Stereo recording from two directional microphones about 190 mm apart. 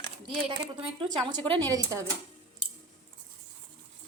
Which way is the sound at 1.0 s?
25° right (ahead or behind).